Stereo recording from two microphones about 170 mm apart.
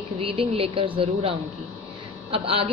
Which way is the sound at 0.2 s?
35° right (ahead or behind).